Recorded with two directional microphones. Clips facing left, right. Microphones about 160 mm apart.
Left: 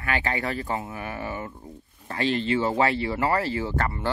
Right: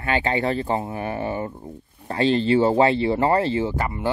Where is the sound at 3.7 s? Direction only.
15° right (ahead or behind).